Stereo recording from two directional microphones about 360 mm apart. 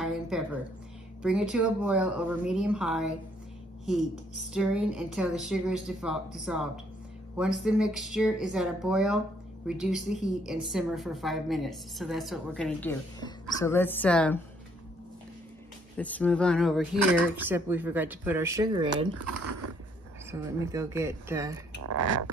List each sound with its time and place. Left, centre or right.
0.0 s a sound: centre
1.2 s a woman's voice: centre
16.0 s a woman's voice: centre
20.2 s a woman's voice: centre
21.7 s speech: right